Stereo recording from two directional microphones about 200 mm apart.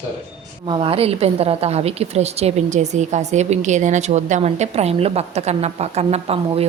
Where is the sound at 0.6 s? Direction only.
25° right (ahead or behind).